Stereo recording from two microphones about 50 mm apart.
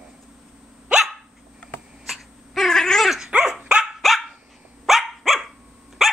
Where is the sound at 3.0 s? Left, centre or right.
Centre.